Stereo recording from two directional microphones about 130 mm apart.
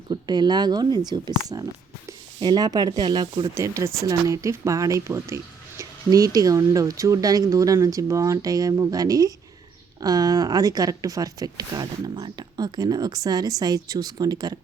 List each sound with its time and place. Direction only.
0.1 s speech: 35° right (ahead or behind)
3.5 s speech: 20° right (ahead or behind)